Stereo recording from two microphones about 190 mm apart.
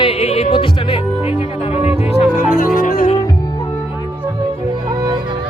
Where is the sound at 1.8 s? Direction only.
10° right (ahead or behind).